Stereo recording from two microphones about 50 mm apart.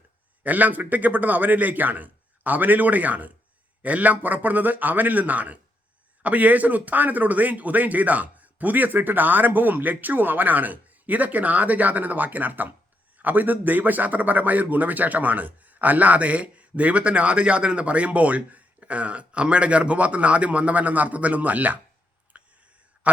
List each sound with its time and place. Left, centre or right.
0.4 s a man's voice: right
22.3 s whispering: right